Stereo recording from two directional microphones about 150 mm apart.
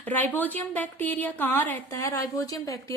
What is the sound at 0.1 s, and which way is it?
A woman's voice, 10° left (ahead or behind).